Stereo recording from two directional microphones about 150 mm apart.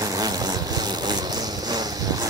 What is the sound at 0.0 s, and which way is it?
Vehicle, 25° right (ahead or behind).